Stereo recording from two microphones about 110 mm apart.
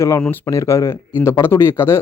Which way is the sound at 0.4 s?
25° left (ahead or behind).